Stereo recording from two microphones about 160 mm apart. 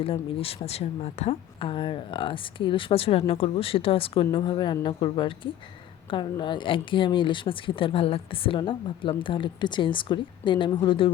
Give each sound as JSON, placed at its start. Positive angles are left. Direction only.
{"t": 0.0, "sound": "speech", "side_deg": 35}